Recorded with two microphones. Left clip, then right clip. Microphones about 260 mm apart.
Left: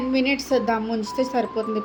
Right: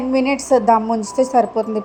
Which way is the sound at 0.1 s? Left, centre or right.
Right.